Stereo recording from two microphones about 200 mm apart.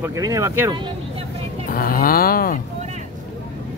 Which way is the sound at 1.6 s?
45° left (ahead or behind).